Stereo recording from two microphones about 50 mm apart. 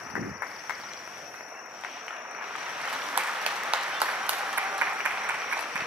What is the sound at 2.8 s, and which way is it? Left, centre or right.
Applause, centre.